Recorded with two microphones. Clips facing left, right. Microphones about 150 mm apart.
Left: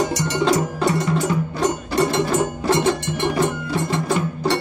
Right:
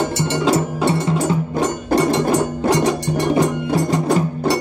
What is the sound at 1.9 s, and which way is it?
Music, 50° right (ahead or behind).